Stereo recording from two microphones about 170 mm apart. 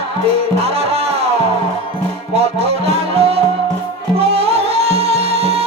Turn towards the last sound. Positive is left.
turn(degrees=-35)  # may be behind; listen again after turning